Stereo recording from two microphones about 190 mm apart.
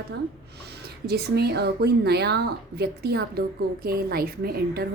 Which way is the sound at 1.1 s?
55° right (ahead or behind).